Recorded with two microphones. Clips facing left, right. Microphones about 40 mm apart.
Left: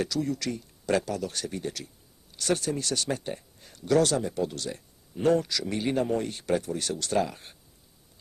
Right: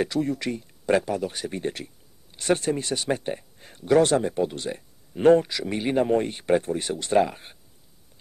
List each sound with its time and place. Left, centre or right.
0.0 s speech: right
5.5 s speech: right